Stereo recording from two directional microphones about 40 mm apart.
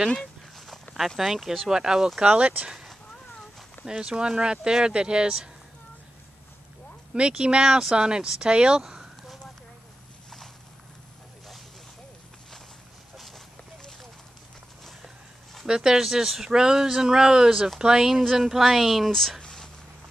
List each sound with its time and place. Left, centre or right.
0.9 s speech: centre
1.7 s speech: centre
2.2 s speech: right
4.0 s speech: right
7.2 s speech: right
15.6 s speech: centre
19.4 s a sound: centre